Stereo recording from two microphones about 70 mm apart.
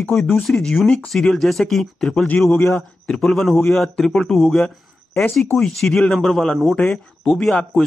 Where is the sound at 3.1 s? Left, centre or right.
Centre.